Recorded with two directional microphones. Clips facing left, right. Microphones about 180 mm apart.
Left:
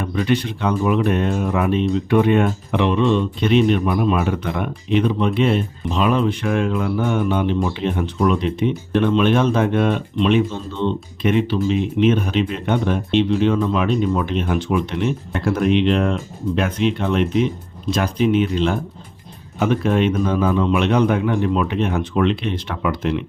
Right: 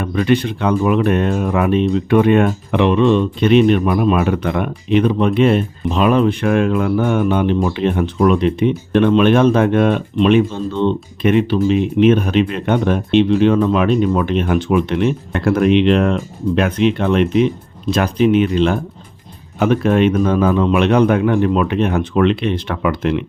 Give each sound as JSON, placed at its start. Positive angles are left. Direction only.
{"t": 0.0, "sound": "speech", "side_deg": -60}
{"t": 17.9, "sound": "speech", "side_deg": -65}